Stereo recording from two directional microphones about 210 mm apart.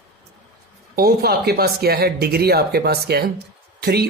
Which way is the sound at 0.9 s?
45° right (ahead or behind).